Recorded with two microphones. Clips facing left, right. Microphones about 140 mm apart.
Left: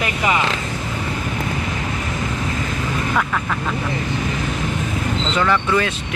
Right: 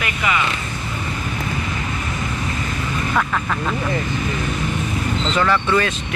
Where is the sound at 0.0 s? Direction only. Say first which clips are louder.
Left 2 dB; 30° left (ahead or behind).